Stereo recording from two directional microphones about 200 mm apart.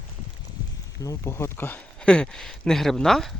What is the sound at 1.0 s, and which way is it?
Speech, 15° left (ahead or behind).